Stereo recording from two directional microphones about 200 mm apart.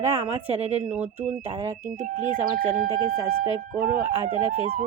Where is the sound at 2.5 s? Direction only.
45° right (ahead or behind).